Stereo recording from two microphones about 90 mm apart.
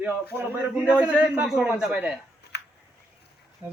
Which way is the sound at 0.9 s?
15° right (ahead or behind).